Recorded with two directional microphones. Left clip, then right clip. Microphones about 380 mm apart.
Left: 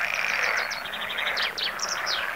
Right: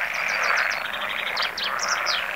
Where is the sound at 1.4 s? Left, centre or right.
Right.